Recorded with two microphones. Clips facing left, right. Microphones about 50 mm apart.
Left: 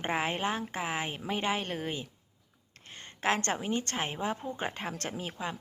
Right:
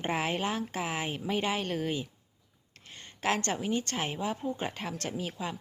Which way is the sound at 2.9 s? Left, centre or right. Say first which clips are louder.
Left 1 dB; left.